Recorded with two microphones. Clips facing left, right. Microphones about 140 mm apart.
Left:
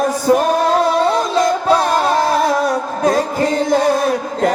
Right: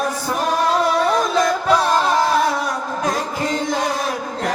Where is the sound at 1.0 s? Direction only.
30° left (ahead or behind).